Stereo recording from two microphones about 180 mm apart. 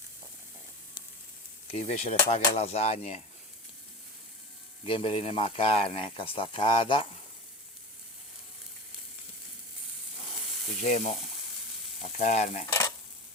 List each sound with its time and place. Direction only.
1.7 s speech: 40° left (ahead or behind)
4.8 s speech: 30° left (ahead or behind)
10.8 s speech: 40° left (ahead or behind)